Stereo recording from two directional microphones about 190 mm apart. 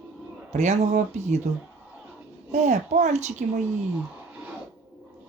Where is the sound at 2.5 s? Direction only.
40° right (ahead or behind).